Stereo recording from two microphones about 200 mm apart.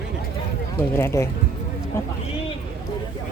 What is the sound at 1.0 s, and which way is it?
Speech, 15° left (ahead or behind).